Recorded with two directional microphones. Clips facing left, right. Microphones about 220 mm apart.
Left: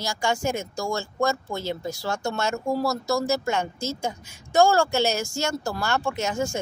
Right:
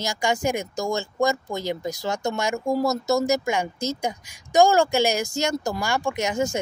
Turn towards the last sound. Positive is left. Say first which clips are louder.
# right 2 dB
turn(degrees=-20)  # may be behind; listen again after turning